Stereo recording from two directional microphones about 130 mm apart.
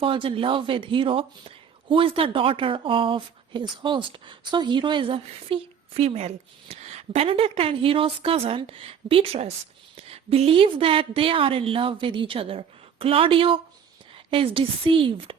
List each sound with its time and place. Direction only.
0.0 s speech: 40° right (ahead or behind)